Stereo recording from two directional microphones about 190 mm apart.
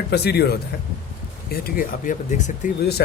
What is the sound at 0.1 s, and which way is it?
A man's voice, 60° left (ahead or behind).